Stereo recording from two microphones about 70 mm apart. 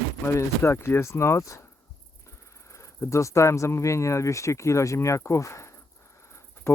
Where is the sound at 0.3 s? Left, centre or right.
Left.